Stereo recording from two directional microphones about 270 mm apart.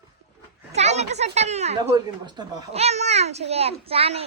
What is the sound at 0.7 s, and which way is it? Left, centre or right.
Speech, right.